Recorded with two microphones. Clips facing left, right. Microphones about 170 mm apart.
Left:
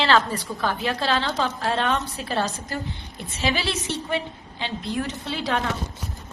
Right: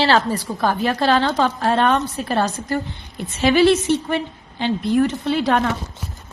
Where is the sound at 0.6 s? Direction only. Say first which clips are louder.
Right 7 dB; 50° right (ahead or behind).